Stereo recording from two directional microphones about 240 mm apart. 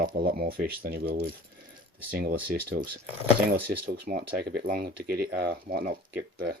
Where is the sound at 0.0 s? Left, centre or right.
Right.